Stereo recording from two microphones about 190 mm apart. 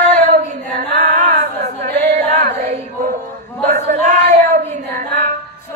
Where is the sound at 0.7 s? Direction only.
45° right (ahead or behind).